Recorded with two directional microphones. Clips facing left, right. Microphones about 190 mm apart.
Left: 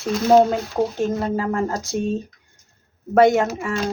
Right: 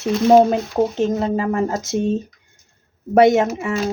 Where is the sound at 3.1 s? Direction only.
20° right (ahead or behind).